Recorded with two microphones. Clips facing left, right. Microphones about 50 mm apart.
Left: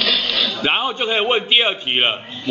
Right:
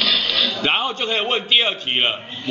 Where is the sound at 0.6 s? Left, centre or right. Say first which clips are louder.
Left 1 dB; centre.